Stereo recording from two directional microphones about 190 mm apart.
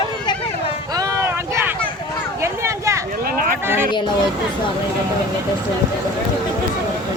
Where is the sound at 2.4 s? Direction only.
15° right (ahead or behind).